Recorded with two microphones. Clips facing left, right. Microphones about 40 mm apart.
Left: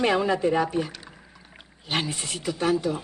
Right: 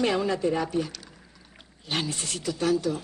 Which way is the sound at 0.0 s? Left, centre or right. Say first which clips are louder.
Left 3 dB; centre.